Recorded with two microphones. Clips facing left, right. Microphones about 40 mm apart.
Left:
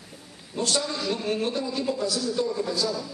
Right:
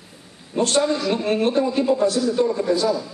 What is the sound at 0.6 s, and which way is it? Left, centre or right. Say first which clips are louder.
A man's voice: right 8 dB; right.